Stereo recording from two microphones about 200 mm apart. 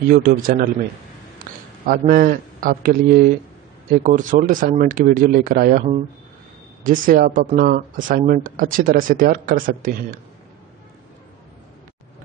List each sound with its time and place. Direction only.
0.1 s a man's voice: 45° right (ahead or behind)